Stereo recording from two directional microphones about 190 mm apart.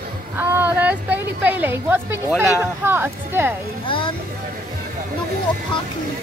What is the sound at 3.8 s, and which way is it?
Speech, 25° left (ahead or behind).